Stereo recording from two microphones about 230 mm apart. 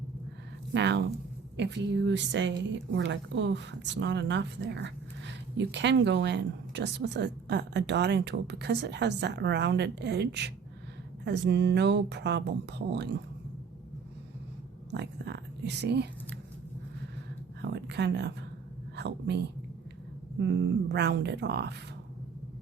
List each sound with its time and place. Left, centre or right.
0.7 s a woman's voice: right
14.9 s a woman's voice: right
17.6 s a sound: right
18.9 s a woman's voice: right
20.9 s a woman's voice: right